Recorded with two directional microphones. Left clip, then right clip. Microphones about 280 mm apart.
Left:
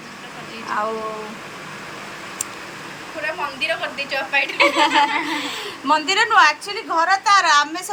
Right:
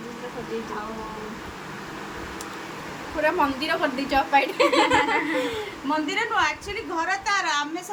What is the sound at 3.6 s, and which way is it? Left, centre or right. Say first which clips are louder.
A woman's voice: left 2 dB; right.